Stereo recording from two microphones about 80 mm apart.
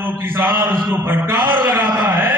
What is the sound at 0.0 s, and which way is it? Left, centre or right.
A man's voice, right.